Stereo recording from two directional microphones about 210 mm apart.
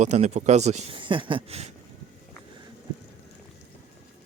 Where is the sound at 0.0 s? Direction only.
35° right (ahead or behind).